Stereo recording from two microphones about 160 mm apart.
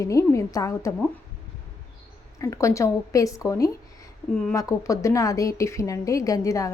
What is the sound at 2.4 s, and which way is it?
A woman's voice, 20° left (ahead or behind).